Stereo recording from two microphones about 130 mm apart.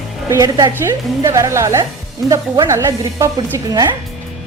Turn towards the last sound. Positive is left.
turn(degrees=-30)  # may be behind; listen again after turning